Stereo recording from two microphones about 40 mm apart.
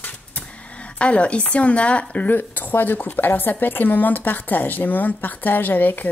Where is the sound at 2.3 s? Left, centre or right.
Left.